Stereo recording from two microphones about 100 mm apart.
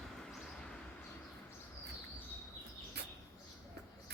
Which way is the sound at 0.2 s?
10° left (ahead or behind).